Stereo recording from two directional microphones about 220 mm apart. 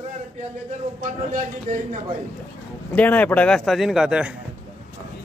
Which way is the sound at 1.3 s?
35° right (ahead or behind).